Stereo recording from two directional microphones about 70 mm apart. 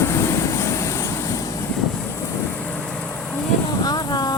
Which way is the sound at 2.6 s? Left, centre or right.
Centre.